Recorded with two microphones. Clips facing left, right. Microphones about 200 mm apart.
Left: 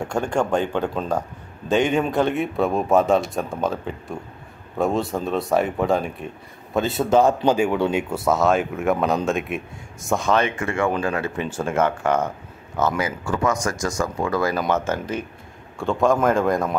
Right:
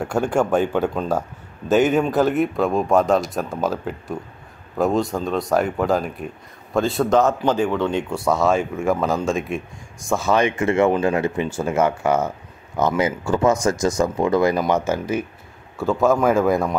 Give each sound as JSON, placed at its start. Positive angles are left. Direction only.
{"t": 0.0, "sound": "speech", "side_deg": -5}